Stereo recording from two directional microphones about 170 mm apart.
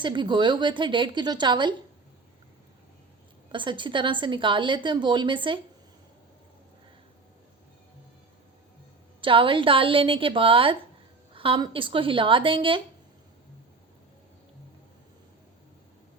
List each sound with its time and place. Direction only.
0.0 s a woman's voice: 25° right (ahead or behind)
3.5 s a woman's voice: 30° right (ahead or behind)
9.2 s a woman's voice: 30° right (ahead or behind)